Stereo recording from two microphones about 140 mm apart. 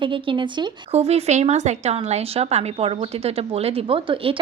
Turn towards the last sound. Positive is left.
turn(degrees=-40)  # may be behind; listen again after turning